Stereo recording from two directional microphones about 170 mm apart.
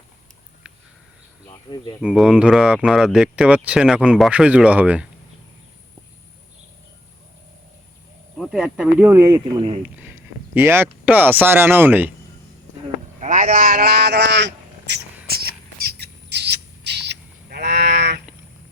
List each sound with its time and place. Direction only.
1.5 s speech: 25° left (ahead or behind)
2.0 s speech: 5° right (ahead or behind)
8.4 s speech: centre (ahead or behind)
9.6 s speech: 35° right (ahead or behind)
9.8 s speech: 10° right (ahead or behind)
13.1 s speech: 50° right (ahead or behind); by 15.0 s 85° right
15.3 s a sound: 65° right (ahead or behind)